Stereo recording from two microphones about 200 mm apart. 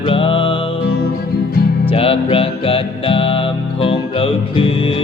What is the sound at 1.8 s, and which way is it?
Music, 30° left (ahead or behind).